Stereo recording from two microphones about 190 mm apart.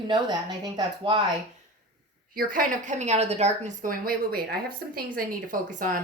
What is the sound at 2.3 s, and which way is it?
A woman's voice, 50° right (ahead or behind).